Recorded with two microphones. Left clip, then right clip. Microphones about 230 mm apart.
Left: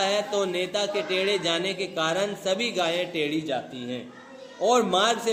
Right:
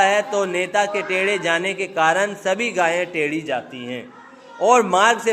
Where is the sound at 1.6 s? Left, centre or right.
Right.